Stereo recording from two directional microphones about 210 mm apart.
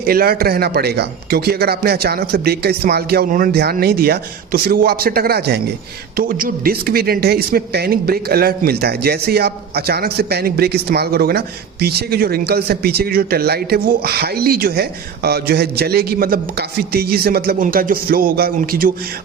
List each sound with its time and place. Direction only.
0.0 s a man's voice: 45° right (ahead or behind)